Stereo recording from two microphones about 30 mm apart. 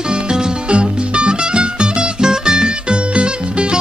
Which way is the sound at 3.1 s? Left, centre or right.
Right.